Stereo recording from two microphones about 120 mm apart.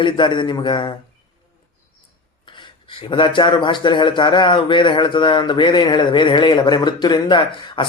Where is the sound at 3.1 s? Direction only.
45° left (ahead or behind).